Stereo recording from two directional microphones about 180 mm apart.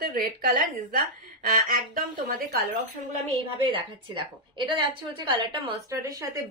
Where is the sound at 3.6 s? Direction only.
25° right (ahead or behind).